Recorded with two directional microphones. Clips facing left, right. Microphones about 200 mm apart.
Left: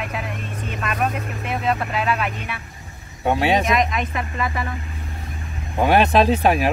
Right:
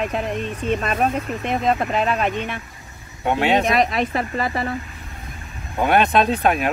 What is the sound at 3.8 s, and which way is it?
Speech, 35° right (ahead or behind).